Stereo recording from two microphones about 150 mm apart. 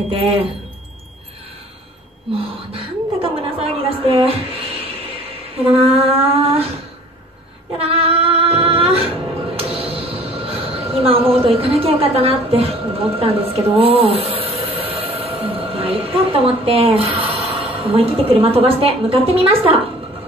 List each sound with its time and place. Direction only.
2.3 s a woman's voice: 40° right (ahead or behind)
7.8 s female singing: 40° right (ahead or behind)
9.6 s a woman's voice: 40° right (ahead or behind)